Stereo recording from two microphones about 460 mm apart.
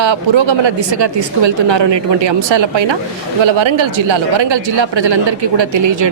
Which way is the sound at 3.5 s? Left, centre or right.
Right.